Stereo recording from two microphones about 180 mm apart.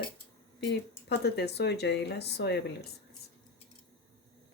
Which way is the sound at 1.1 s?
65° left (ahead or behind).